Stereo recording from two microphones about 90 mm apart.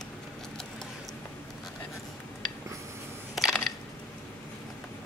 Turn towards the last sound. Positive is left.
turn(degrees=5)  # may be behind; listen again after turning